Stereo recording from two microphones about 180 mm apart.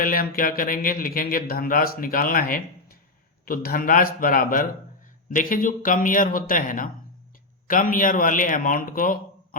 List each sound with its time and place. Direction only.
0.0 s speech: 55° left (ahead or behind)